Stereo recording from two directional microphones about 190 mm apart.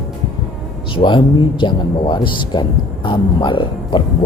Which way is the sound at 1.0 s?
25° left (ahead or behind).